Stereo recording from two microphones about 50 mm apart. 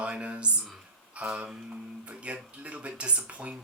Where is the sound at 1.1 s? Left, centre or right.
Right.